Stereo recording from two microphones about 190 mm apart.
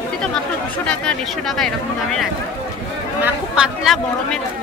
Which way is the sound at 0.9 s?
5° left (ahead or behind).